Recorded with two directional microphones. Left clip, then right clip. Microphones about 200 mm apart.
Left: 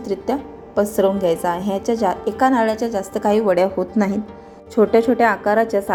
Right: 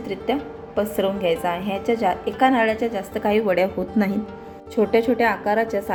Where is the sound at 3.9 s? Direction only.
5° left (ahead or behind).